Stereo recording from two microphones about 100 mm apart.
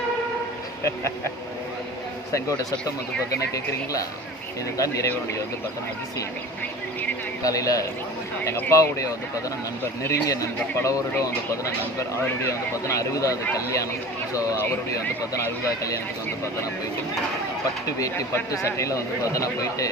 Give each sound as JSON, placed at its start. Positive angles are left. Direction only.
{"t": 4.8, "sound": "speech", "side_deg": 35}
{"t": 7.4, "sound": "speech", "side_deg": 35}
{"t": 14.9, "sound": "speech", "side_deg": 35}
{"t": 18.0, "sound": "speech", "side_deg": 35}